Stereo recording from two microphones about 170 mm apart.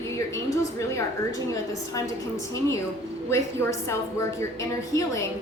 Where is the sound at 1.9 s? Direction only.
20° left (ahead or behind).